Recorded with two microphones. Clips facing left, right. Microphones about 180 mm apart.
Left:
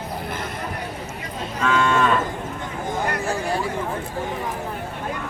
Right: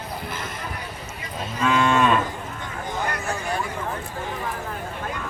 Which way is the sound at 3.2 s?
30° left (ahead or behind).